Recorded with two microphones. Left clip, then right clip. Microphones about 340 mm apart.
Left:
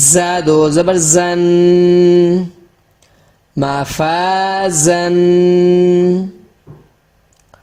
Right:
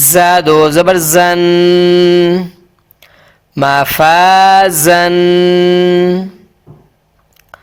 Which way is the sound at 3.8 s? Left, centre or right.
Right.